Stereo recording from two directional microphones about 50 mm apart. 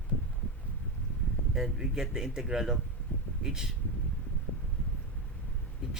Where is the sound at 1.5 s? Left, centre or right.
Centre.